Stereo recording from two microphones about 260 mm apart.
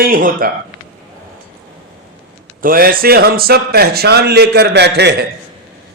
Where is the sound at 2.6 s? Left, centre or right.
Right.